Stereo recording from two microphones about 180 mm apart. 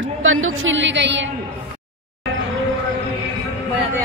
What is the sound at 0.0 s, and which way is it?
A woman's voice, 90° right.